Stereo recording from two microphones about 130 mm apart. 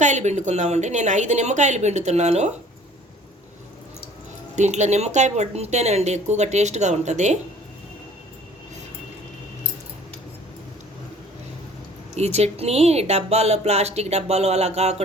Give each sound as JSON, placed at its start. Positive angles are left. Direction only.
{"t": 0.0, "sound": "speech", "side_deg": -65}
{"t": 4.5, "sound": "speech", "side_deg": -65}
{"t": 12.1, "sound": "speech", "side_deg": -55}